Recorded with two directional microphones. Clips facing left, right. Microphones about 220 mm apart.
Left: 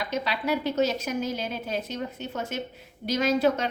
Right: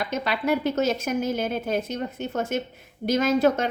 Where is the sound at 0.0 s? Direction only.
50° right (ahead or behind).